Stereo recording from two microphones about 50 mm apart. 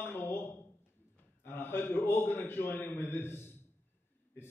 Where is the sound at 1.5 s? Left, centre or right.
Left.